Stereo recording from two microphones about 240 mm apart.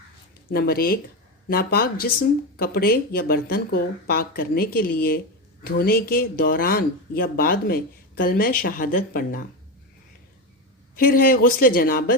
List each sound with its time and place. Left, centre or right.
0.5 s speech: left
10.9 s speech: left